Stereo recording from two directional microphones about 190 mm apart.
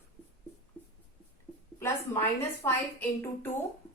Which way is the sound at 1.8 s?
15° left (ahead or behind).